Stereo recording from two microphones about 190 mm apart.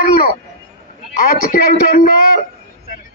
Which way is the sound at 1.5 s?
50° left (ahead or behind).